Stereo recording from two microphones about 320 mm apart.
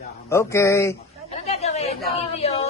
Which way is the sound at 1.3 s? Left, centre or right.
Centre.